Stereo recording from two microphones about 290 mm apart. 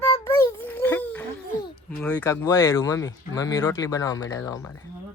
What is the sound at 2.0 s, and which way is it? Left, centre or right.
Speech, centre.